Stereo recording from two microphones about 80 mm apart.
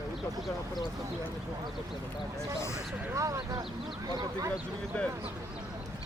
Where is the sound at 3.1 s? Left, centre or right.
Right.